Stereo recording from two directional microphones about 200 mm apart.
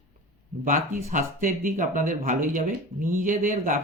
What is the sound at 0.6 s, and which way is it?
A man's voice, 40° right (ahead or behind).